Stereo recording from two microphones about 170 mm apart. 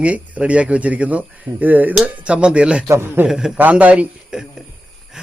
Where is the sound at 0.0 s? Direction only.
10° right (ahead or behind).